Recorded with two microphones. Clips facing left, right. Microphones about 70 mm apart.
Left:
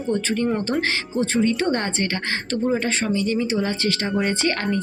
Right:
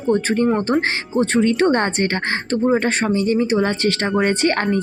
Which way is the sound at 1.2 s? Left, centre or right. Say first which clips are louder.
Right 5 dB; right.